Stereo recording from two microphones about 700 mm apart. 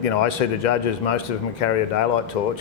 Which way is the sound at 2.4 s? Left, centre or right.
Left.